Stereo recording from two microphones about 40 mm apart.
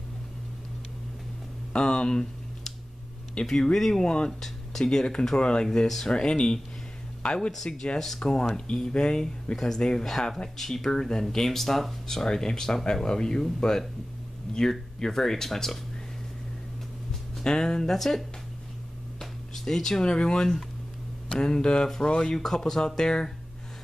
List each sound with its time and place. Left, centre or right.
1.7 s a sound: left
3.4 s speech: centre
4.0 s speech: left
4.3 s speech: centre
4.8 s speech: left
5.7 s speech: centre
6.0 s speech: left
17.4 s speech: centre
17.9 s speech: centre
19.1 s a sound: centre
20.1 s speech: left
22.4 s speech: centre